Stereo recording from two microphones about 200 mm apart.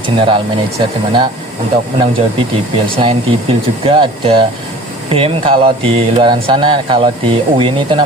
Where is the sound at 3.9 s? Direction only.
25° right (ahead or behind).